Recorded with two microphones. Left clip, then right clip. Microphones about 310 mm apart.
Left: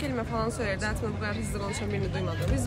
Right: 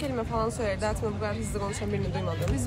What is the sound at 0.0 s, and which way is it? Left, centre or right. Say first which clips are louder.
Speech: right 1 dB; centre.